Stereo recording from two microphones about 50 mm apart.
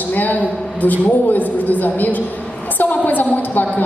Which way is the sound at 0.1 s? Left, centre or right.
Left.